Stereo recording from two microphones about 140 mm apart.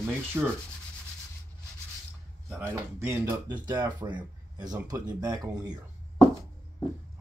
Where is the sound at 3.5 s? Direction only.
35° right (ahead or behind).